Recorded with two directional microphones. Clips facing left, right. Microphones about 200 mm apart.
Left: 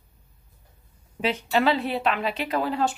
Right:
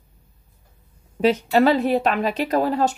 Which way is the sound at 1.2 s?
40° right (ahead or behind).